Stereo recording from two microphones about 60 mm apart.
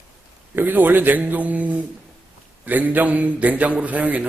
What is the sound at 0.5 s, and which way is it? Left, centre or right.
A man's voice, right.